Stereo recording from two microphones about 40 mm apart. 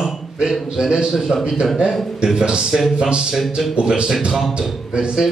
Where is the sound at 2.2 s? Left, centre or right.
Right.